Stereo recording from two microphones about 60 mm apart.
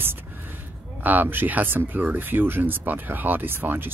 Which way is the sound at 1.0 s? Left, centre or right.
Right.